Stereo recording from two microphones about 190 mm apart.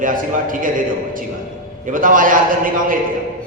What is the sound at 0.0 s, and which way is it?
Speech, 45° right (ahead or behind).